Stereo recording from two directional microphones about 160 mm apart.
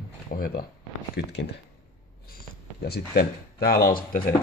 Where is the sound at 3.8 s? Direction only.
30° left (ahead or behind).